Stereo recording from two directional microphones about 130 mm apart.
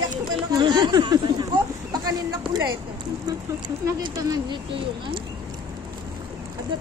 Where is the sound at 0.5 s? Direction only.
35° right (ahead or behind).